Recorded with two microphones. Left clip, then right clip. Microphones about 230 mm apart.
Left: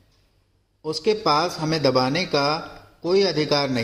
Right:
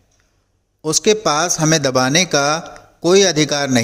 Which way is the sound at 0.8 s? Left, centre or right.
Right.